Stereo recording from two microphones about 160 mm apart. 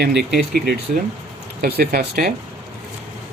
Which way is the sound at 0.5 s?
85° right.